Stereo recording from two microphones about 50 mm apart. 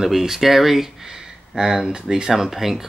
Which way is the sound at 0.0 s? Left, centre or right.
Centre.